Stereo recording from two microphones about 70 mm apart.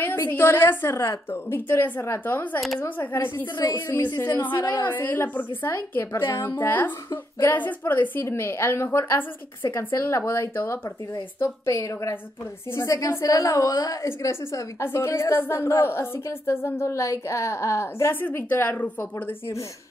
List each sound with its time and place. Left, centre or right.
0.0 s a woman's voice: left
3.5 s speech: left
4.2 s a woman's voice: left
11.7 s a woman's voice: left
14.0 s a woman's voice: left
18.2 s a woman's voice: left